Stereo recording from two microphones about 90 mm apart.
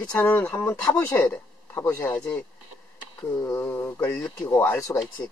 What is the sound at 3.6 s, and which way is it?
Speech, 25° left (ahead or behind).